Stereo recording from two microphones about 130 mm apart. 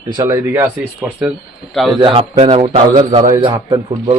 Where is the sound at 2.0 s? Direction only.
45° right (ahead or behind).